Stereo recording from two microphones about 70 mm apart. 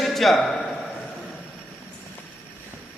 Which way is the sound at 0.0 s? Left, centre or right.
Centre.